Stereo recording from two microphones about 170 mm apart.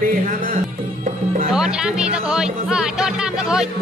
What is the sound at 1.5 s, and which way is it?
Speech, 5° right (ahead or behind).